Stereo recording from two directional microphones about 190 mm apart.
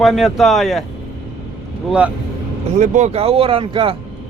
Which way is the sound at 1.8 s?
5° right (ahead or behind).